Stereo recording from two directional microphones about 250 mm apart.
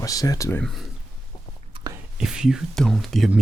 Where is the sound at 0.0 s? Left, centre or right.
Centre.